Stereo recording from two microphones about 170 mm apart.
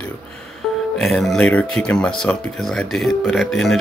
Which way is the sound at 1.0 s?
Centre (ahead or behind).